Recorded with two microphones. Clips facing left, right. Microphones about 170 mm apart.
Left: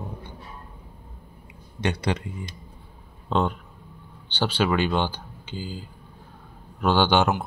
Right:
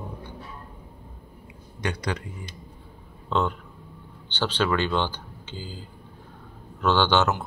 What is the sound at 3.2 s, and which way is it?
Speech, 15° left (ahead or behind).